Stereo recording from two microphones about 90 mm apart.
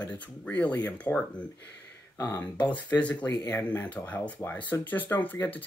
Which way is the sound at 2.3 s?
15° left (ahead or behind).